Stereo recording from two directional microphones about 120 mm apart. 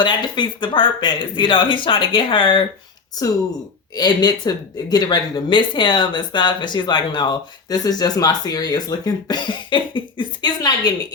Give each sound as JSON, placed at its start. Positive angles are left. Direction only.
{"t": 0.0, "sound": "speech", "side_deg": 40}
{"t": 3.9, "sound": "speech", "side_deg": 35}